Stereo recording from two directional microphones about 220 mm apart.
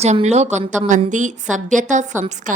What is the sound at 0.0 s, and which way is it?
A woman's voice, 30° right (ahead or behind).